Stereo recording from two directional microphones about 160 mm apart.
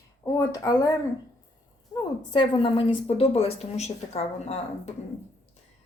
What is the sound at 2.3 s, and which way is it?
A woman's voice, 30° left (ahead or behind).